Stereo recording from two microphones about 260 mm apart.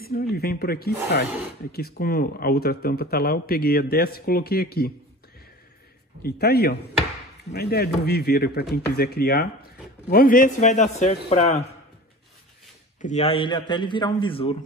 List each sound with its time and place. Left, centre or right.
0.0 s speech: left
6.2 s a man's voice: left
13.0 s a man's voice: left